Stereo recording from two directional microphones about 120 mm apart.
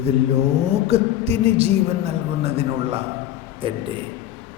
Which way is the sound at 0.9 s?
60° right (ahead or behind).